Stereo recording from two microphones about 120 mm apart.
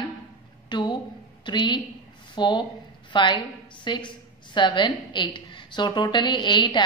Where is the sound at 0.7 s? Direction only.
40° left (ahead or behind).